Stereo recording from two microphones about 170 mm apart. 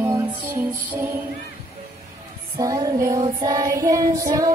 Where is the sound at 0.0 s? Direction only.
15° right (ahead or behind).